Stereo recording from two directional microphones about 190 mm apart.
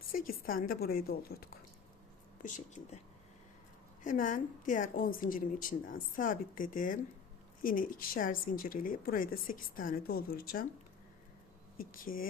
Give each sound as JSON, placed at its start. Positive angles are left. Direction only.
{"t": 0.1, "sound": "a woman's voice", "side_deg": 50}
{"t": 4.0, "sound": "a woman's voice", "side_deg": 45}
{"t": 11.9, "sound": "a woman's voice", "side_deg": 45}